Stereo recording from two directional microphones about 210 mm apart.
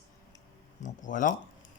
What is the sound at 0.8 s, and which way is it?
Speech, 40° left (ahead or behind).